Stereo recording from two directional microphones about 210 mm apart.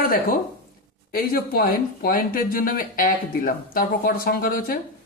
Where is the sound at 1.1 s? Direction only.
45° left (ahead or behind).